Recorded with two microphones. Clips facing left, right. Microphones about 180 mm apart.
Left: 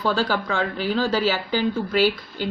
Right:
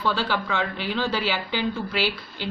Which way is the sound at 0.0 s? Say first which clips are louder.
Left 3 dB; 40° left (ahead or behind).